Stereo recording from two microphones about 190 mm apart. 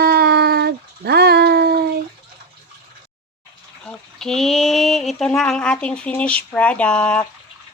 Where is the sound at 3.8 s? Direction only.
Centre (ahead or behind).